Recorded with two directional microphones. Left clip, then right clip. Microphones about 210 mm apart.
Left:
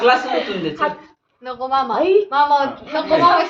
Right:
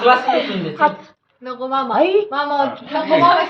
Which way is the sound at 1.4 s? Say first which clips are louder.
Left 1 dB; 20° left (ahead or behind).